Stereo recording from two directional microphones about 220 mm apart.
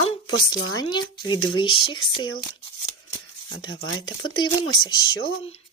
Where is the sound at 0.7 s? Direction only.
20° left (ahead or behind).